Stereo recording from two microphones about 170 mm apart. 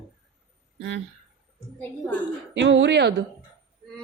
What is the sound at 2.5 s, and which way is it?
Speech, 90° right.